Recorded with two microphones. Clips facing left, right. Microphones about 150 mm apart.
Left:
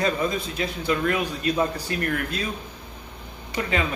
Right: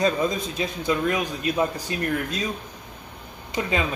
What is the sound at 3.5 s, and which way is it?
Speech, 20° right (ahead or behind).